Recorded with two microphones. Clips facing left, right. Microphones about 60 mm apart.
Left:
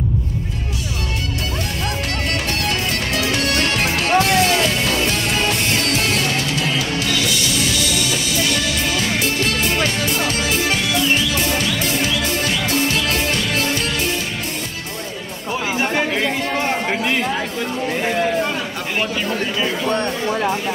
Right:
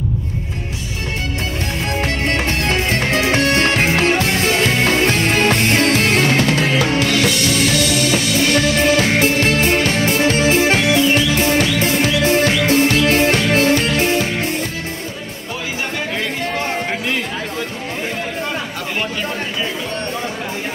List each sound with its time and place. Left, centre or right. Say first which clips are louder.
2.2 s music: right 2 dB; right
15.8 s chatter: left 3 dB; left
16.9 s a sound: left 1 dB; centre